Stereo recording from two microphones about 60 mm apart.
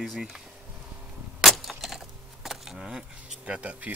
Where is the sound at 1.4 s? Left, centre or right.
Centre.